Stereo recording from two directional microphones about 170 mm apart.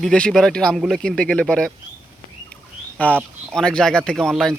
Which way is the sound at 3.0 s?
10° left (ahead or behind).